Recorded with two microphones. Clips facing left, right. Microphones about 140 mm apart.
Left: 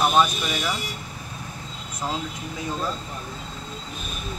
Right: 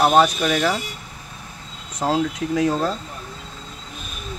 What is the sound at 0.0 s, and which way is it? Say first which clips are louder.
Speech: right 5 dB; 70° right (ahead or behind).